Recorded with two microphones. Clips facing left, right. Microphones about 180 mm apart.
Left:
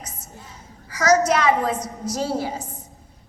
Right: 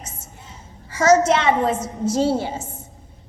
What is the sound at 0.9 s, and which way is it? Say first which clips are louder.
A woman's voice: right 3 dB; 25° right (ahead or behind).